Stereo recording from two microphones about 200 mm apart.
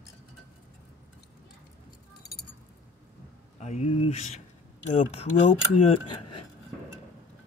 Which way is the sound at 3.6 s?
35° left (ahead or behind).